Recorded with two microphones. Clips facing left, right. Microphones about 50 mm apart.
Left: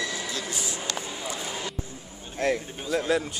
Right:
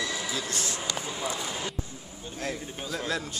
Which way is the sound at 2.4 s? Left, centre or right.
Left.